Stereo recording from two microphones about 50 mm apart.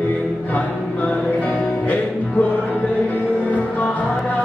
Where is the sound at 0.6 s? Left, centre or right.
Left.